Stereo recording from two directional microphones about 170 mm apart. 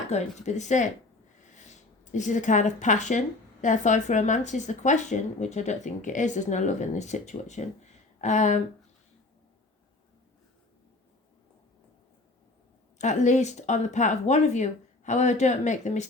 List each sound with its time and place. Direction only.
0.1 s speech: 45° left (ahead or behind)
13.0 s speech: 45° left (ahead or behind)